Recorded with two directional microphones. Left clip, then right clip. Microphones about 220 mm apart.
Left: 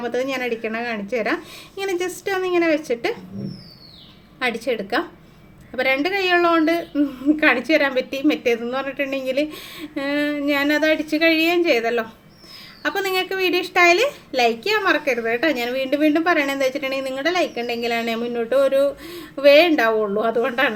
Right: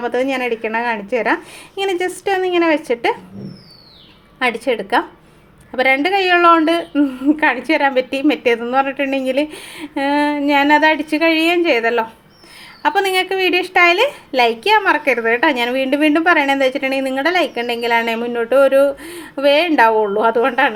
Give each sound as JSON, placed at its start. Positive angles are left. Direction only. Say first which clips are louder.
{"t": 0.0, "sound": "a woman's voice", "louder": "right 5 dB", "side_deg": -10}
{"t": 4.4, "sound": "a woman's voice", "louder": "right 5 dB", "side_deg": -10}
{"t": 9.6, "sound": "speech", "louder": "right 3 dB", "side_deg": 35}
{"t": 10.2, "sound": "a woman's voice", "louder": "right 6 dB", "side_deg": -10}